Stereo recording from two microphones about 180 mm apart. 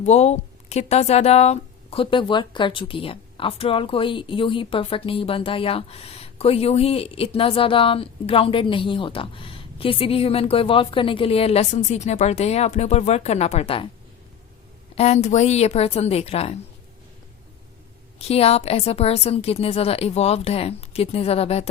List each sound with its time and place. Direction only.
0.0 s speech: 40° left (ahead or behind)
14.9 s speech: 35° left (ahead or behind)
18.2 s speech: 35° left (ahead or behind)